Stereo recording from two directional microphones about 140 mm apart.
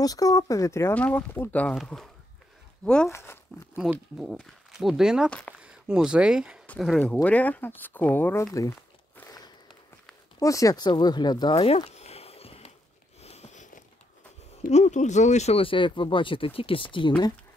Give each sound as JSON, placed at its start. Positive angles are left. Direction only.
{"t": 0.0, "sound": "speech", "side_deg": 25}
{"t": 3.1, "sound": "speech", "side_deg": 20}
{"t": 3.8, "sound": "speech", "side_deg": -5}
{"t": 7.2, "sound": "speech", "side_deg": 10}
{"t": 8.5, "sound": "a sound", "side_deg": 20}
{"t": 9.3, "sound": "a sound", "side_deg": 30}
{"t": 10.4, "sound": "speech", "side_deg": 25}
{"t": 13.2, "sound": "a sound", "side_deg": 50}
{"t": 14.7, "sound": "speech", "side_deg": 55}